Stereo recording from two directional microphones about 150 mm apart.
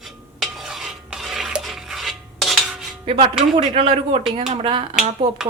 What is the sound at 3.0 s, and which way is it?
Speech, 35° right (ahead or behind).